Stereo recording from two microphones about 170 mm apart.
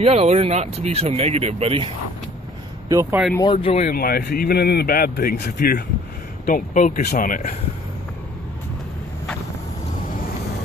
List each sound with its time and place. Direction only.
0.0 s speech: 35° right (ahead or behind)
2.9 s speech: 20° right (ahead or behind)
3.3 s speech: 25° left (ahead or behind)
3.9 s speech: 65° left (ahead or behind)